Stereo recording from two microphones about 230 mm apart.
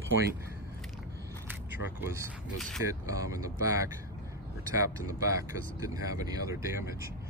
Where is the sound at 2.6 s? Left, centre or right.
Centre.